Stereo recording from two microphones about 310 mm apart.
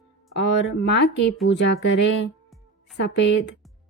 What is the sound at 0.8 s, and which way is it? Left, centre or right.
Speech, left.